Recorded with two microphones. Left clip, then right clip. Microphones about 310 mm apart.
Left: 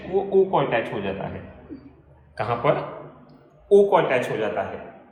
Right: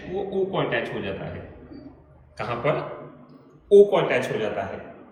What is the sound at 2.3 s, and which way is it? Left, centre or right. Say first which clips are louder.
A man's voice: left 3 dB; left.